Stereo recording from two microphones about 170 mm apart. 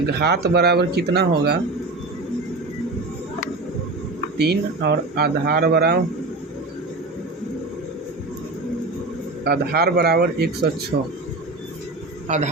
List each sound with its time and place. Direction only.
0.2 s speech: 75° right (ahead or behind)
4.4 s speech: 70° right (ahead or behind)
9.4 s speech: 65° right (ahead or behind)